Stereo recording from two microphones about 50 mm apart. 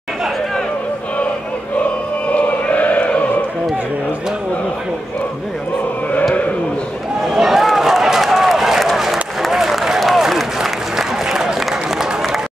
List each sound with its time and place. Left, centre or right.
2.2 s choir: left
7.3 s run: centre